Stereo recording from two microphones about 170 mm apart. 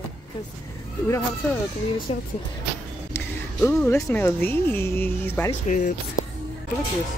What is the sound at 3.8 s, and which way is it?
Speech, 15° left (ahead or behind).